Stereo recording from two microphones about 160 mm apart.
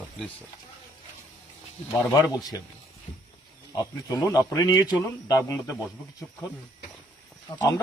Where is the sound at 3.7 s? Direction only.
25° left (ahead or behind).